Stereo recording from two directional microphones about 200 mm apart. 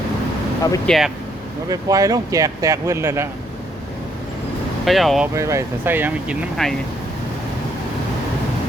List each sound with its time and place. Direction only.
0.9 s speech: centre (ahead or behind)
1.7 s speech: 15° right (ahead or behind)
4.9 s speech: centre (ahead or behind)
5.3 s speech: 15° right (ahead or behind)